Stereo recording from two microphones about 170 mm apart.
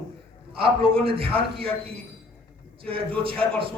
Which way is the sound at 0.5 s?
30° right (ahead or behind).